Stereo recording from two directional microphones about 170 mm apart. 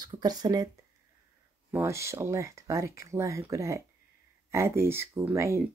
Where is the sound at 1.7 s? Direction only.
15° right (ahead or behind).